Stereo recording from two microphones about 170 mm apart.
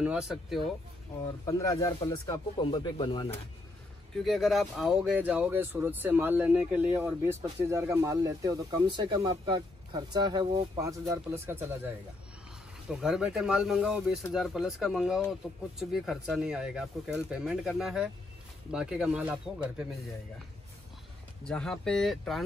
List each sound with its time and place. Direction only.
0.0 s speech: 5° right (ahead or behind)
1.4 s speech: 20° left (ahead or behind)
4.2 s speech: centre (ahead or behind)
12.9 s speech: 5° right (ahead or behind)
21.5 s speech: 5° left (ahead or behind)